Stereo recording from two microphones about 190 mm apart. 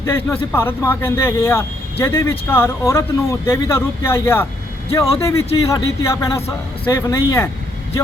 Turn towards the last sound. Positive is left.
turn(degrees=15)  # may be behind; listen again after turning